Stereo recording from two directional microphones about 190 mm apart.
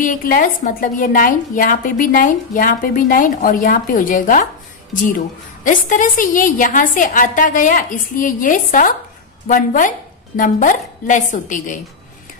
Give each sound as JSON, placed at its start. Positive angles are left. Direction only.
{"t": 0.0, "sound": "a woman's voice", "side_deg": 45}
{"t": 5.6, "sound": "a woman's voice", "side_deg": 45}